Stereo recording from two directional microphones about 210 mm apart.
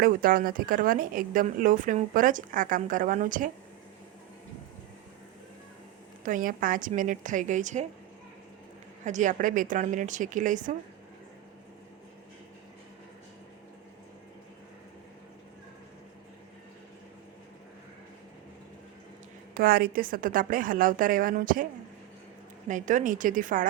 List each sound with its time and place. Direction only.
0.0 s speech: 45° right (ahead or behind)
6.2 s speech: 40° right (ahead or behind)
9.0 s speech: 35° right (ahead or behind)
19.5 s speech: 45° right (ahead or behind)
22.7 s speech: 35° right (ahead or behind)